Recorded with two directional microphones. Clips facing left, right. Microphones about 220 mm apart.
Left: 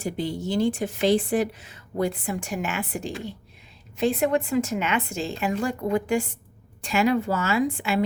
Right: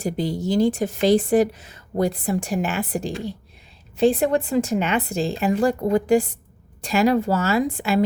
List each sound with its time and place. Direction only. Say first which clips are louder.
0.0 s speech: right 4 dB; 40° right (ahead or behind)